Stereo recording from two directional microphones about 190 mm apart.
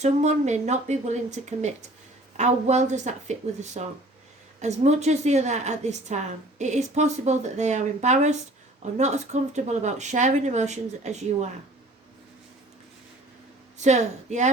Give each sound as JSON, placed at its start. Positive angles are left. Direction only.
{"t": 0.0, "sound": "a woman's voice", "side_deg": -40}
{"t": 13.7, "sound": "a woman's voice", "side_deg": -40}